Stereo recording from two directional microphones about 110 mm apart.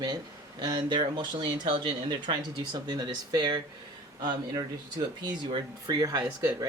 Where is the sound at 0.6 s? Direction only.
40° right (ahead or behind).